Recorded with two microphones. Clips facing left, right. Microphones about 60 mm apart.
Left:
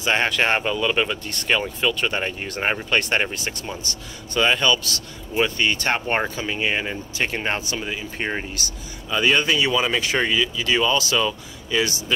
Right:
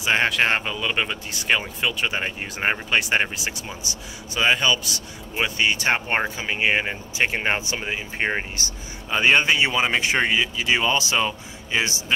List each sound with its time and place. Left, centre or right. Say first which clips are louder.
0.0 s speech: even; centre; by 11.9 s right